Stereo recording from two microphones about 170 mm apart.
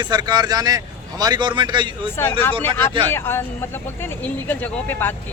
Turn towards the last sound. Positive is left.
turn(degrees=10)  # may be behind; listen again after turning